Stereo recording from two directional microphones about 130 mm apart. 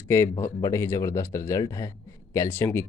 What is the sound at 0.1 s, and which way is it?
Speech, 20° left (ahead or behind).